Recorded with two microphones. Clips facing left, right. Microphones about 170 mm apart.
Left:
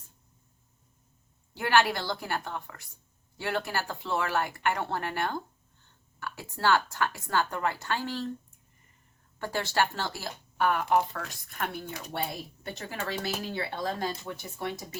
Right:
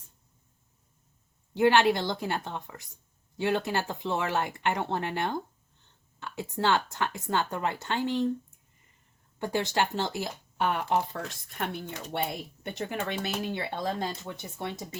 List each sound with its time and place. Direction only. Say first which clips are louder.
1.5 s speech: right 4 dB; 20° right (ahead or behind)
9.4 s speech: right 1 dB; 20° right (ahead or behind)